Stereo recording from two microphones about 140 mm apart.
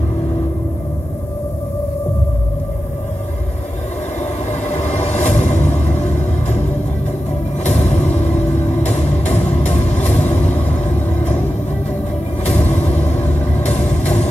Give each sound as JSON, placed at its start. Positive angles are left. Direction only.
{"t": 4.2, "sound": "music", "side_deg": 55}
{"t": 7.6, "sound": "music", "side_deg": 55}
{"t": 10.7, "sound": "vehicle", "side_deg": 55}
{"t": 13.3, "sound": "vehicle", "side_deg": 55}